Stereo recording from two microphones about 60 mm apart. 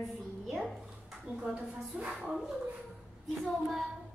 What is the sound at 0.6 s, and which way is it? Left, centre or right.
A woman's voice, centre.